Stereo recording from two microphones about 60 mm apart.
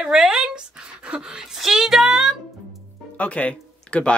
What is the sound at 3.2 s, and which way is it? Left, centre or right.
Speech, left.